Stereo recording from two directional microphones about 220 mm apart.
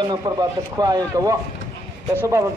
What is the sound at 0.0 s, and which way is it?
Speech, 20° right (ahead or behind).